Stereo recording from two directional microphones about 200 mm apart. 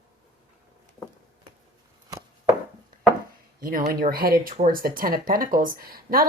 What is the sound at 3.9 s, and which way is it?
Speech, 45° right (ahead or behind).